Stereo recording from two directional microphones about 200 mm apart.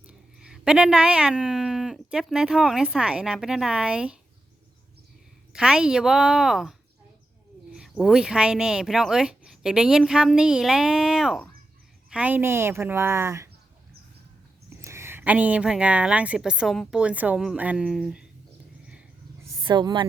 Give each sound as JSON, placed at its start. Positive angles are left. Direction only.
{"t": 0.1, "sound": "speech", "side_deg": -5}
{"t": 5.5, "sound": "a woman's voice", "side_deg": -5}
{"t": 14.8, "sound": "a woman's voice", "side_deg": -15}
{"t": 19.6, "sound": "speech", "side_deg": -20}